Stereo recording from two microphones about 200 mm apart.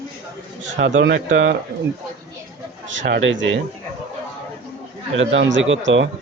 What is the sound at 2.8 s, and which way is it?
Speech, 65° right (ahead or behind).